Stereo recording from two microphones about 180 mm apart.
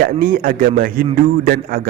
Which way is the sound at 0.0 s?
55° right (ahead or behind).